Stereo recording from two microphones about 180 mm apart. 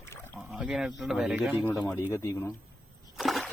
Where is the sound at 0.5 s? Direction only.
5° right (ahead or behind).